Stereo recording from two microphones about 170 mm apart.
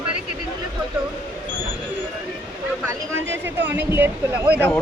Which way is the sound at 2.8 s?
15° right (ahead or behind).